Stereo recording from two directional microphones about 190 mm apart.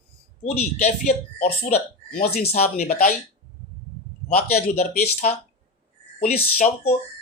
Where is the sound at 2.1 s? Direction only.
55° left (ahead or behind).